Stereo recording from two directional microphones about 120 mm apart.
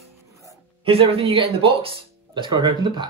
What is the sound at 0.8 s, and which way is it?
Speech, 50° right (ahead or behind).